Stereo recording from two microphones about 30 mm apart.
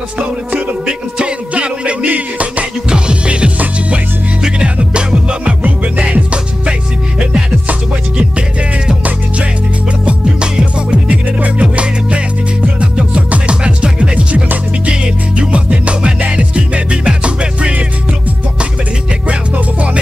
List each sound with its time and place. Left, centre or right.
0.2 s music: right
3.3 s music: right
10.6 s music: right
19.2 s music: right